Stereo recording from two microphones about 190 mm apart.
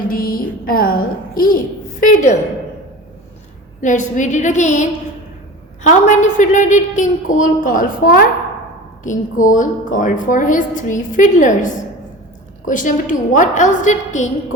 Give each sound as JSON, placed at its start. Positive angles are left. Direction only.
{"t": 0.1, "sound": "a woman's voice", "side_deg": 50}
{"t": 3.8, "sound": "a woman's voice", "side_deg": 40}